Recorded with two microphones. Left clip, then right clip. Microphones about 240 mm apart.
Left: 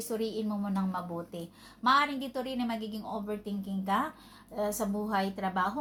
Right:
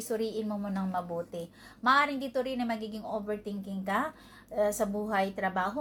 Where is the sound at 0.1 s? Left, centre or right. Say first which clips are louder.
Right 2 dB; centre.